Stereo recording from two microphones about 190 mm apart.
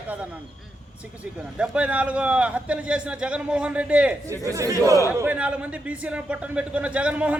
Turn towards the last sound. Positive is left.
turn(degrees=-5)  # may be behind; listen again after turning